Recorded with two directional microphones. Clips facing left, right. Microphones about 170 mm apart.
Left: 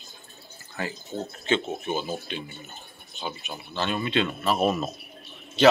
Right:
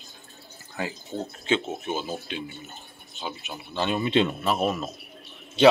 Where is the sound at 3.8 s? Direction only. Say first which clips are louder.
Right 3 dB; 20° right (ahead or behind).